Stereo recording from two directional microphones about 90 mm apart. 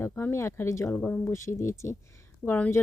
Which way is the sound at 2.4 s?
20° left (ahead or behind).